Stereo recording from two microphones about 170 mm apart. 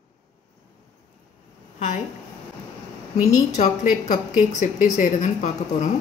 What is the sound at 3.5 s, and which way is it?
A woman's voice, 45° left (ahead or behind).